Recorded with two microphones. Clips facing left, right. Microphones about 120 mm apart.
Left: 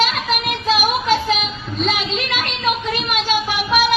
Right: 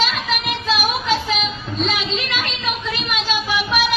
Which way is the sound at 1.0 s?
45° left (ahead or behind).